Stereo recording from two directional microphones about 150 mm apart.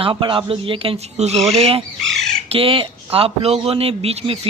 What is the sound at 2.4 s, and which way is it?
Speech, 40° right (ahead or behind).